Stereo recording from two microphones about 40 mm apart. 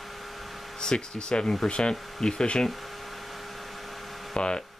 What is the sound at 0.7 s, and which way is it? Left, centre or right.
Speech, left.